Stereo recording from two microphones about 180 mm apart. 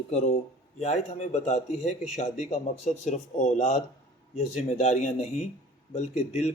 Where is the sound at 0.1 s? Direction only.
40° left (ahead or behind).